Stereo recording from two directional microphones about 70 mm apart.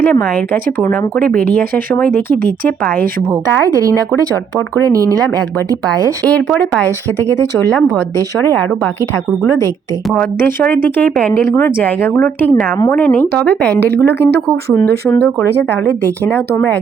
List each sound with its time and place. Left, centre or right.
0.0 s speech: left
4.8 s speech: right
6.2 s speech: centre
6.8 s speech: left
7.7 s speech: centre
10.7 s speech: left
13.8 s speech: left
15.2 s speech: left